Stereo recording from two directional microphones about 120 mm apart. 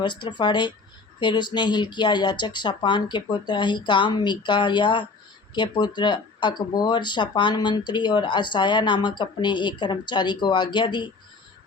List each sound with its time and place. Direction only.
0.0 s speech: 40° left (ahead or behind)